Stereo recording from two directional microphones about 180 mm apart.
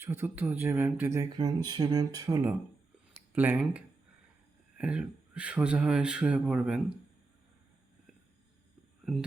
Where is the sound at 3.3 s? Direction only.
10° right (ahead or behind).